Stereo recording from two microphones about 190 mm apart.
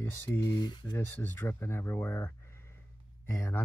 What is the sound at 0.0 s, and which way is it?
Speech, 10° left (ahead or behind).